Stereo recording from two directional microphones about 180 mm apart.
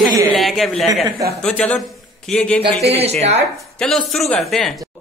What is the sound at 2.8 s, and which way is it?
Speech, 35° right (ahead or behind).